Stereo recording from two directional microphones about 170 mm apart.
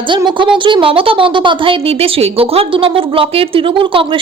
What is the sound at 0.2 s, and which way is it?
A woman's voice, 30° right (ahead or behind).